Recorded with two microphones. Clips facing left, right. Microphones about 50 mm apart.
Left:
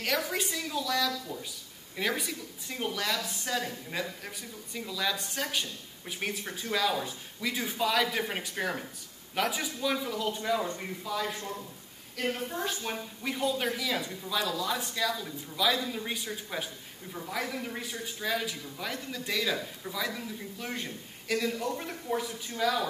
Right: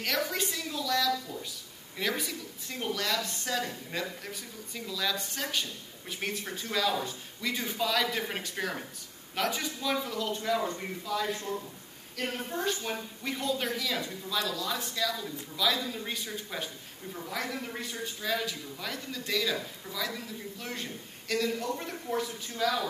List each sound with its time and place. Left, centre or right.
0.0 s a woman's voice: centre